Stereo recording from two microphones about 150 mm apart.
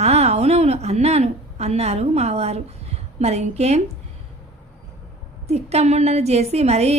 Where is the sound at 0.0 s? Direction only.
45° right (ahead or behind).